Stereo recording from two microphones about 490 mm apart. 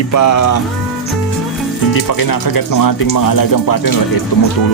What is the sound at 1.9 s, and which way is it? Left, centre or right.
Speech, left.